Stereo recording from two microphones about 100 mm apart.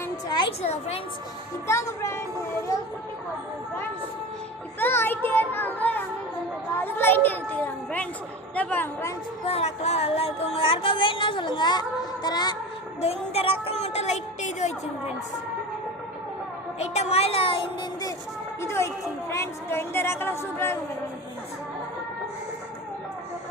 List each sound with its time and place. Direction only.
0.6 s speech: 90° left
1.6 s a woman's voice: 30° left (ahead or behind)
4.8 s a woman's voice: 20° left (ahead or behind)
9.5 s speech: 90° left; by 12.5 s 45° left (ahead or behind)
13.0 s speech: 90° left
16.7 s speech: 90° left; by 17.7 s 65° left (ahead or behind)
18.6 s a woman's voice: 25° left (ahead or behind)